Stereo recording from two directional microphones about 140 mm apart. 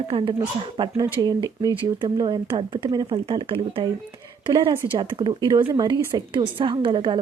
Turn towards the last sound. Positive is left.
turn(degrees=-35)  # may be behind; listen again after turning